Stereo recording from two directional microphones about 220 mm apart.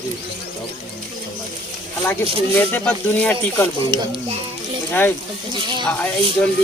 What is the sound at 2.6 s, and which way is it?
Speech, 5° left (ahead or behind).